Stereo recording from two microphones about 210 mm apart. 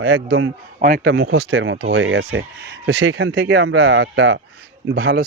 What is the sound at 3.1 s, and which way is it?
Speech, 55° right (ahead or behind).